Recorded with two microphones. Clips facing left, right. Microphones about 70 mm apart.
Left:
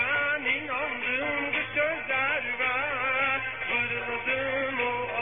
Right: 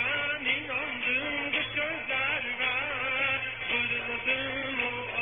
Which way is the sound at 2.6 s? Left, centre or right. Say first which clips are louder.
Left 4 dB; left.